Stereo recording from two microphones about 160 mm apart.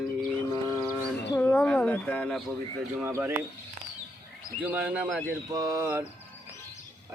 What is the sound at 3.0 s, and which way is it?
Speech, 15° right (ahead or behind).